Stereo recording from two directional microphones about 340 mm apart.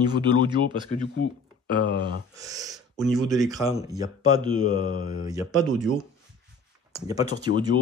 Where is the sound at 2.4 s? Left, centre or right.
Centre.